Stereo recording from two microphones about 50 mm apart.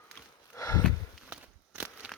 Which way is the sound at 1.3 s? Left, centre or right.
Right.